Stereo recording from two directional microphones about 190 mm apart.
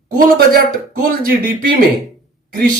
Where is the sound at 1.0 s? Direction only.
50° right (ahead or behind).